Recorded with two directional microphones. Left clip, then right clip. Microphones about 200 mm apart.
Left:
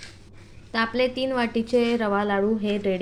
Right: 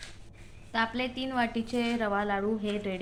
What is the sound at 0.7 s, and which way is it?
A woman's voice, 20° left (ahead or behind).